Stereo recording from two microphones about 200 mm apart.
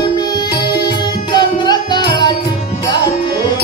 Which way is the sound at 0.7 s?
20° left (ahead or behind).